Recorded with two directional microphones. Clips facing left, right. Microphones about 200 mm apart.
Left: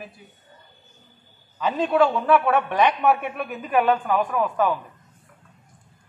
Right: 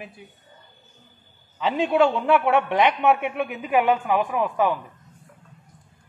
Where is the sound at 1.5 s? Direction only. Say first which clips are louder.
Even; 25° right (ahead or behind).